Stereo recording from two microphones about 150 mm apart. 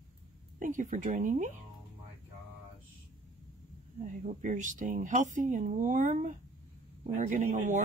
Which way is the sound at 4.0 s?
55° right (ahead or behind).